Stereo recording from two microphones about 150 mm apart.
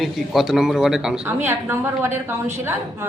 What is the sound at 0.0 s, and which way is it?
Speech, centre (ahead or behind).